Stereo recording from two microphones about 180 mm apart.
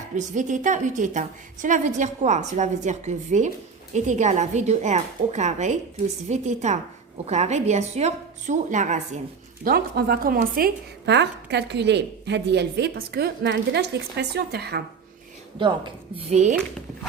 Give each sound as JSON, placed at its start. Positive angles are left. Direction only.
{"t": 0.2, "sound": "a woman's voice", "side_deg": -45}
{"t": 9.6, "sound": "a woman's voice", "side_deg": -60}
{"t": 15.5, "sound": "a woman's voice", "side_deg": -25}
{"t": 16.3, "sound": "a woman's voice", "side_deg": -40}